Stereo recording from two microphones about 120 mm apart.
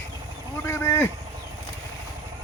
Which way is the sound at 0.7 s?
20° left (ahead or behind).